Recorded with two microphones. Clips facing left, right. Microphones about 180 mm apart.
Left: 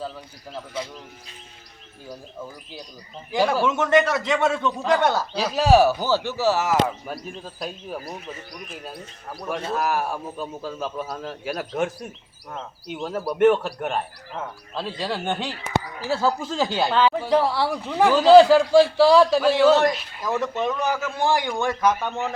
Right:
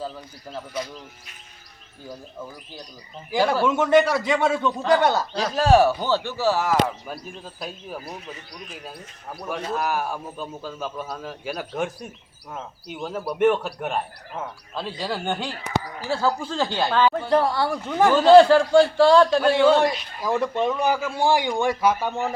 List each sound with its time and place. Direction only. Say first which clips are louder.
0.7 s speech: right 1 dB; 25° left (ahead or behind)
3.6 s a man's voice: right 3 dB; 10° right (ahead or behind)
9.7 s speech: left 1 dB; centre (ahead or behind)
20.2 s a man's voice: right 2 dB; 10° right (ahead or behind)